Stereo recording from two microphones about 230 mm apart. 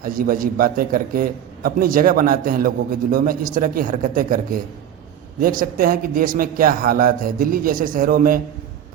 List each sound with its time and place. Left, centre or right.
0.0 s a man's voice: right